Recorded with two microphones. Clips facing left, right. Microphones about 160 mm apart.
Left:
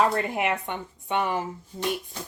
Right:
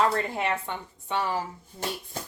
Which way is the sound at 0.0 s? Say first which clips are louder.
Left 2 dB; 15° left (ahead or behind).